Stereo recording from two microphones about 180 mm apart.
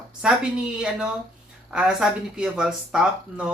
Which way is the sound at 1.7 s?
5° right (ahead or behind).